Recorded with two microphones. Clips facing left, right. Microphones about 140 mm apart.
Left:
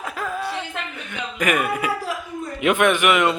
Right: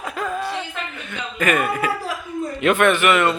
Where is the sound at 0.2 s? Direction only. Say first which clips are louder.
Right 2 dB; 5° left (ahead or behind).